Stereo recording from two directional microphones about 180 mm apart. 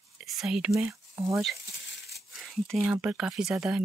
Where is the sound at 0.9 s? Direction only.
15° right (ahead or behind).